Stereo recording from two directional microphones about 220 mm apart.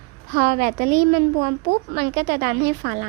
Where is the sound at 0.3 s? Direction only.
35° right (ahead or behind).